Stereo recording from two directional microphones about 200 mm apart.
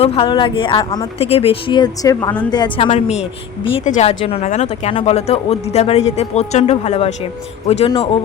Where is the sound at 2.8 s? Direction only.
35° left (ahead or behind).